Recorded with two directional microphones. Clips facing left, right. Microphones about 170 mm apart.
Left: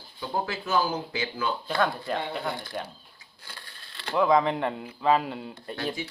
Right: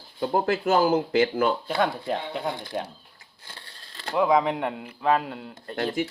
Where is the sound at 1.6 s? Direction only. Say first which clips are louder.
Right 2 dB; 20° right (ahead or behind).